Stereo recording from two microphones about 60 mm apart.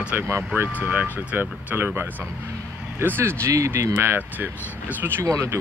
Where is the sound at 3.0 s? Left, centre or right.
Right.